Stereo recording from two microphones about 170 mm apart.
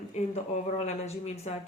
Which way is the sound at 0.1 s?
40° left (ahead or behind).